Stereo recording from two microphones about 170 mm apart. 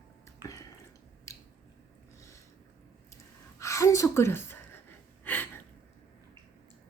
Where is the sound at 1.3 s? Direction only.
15° left (ahead or behind).